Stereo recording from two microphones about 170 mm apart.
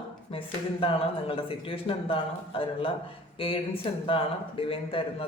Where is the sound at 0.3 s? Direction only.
30° left (ahead or behind).